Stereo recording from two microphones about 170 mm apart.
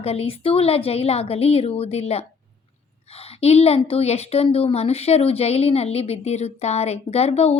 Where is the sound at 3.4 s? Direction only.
40° left (ahead or behind).